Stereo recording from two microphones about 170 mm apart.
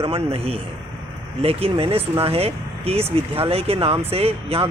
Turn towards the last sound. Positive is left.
turn(degrees=-35)  # may be behind; listen again after turning